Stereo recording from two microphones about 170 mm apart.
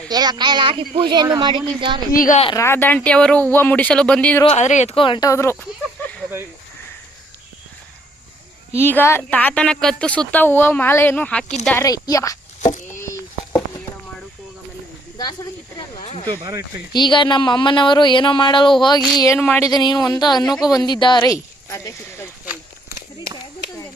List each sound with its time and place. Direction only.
0.1 s speech: 25° right (ahead or behind)
2.1 s a woman's voice: 50° left (ahead or behind)
2.6 s speech: 15° left (ahead or behind)
4.4 s speech: 40° left (ahead or behind); by 5.6 s 15° left (ahead or behind)
8.7 s speech: 15° left (ahead or behind)
11.8 s speech: 20° left (ahead or behind)
12.6 s a sound: 45° left (ahead or behind)
13.0 s a sound: 15° left (ahead or behind)
15.2 s speech: 25° left (ahead or behind)
16.0 s a sound: 35° left (ahead or behind)
16.4 s speech: 15° right (ahead or behind)
16.9 s speech: 25° left (ahead or behind)